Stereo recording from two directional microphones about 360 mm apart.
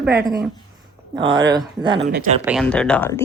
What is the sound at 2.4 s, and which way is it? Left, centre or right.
Speech, centre.